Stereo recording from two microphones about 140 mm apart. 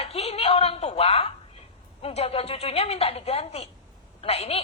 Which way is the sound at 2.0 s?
45° left (ahead or behind).